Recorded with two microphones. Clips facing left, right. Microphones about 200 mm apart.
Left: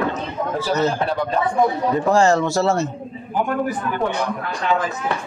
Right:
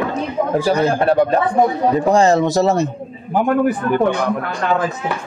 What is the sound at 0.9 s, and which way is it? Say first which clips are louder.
Speech: right 7 dB; 60° right (ahead or behind).